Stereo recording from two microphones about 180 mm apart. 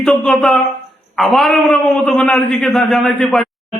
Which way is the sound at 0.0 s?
5° left (ahead or behind).